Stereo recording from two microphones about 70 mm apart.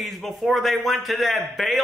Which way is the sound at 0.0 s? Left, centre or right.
Centre.